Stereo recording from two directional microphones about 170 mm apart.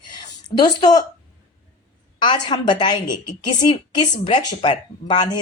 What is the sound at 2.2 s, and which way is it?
Speech, 25° left (ahead or behind).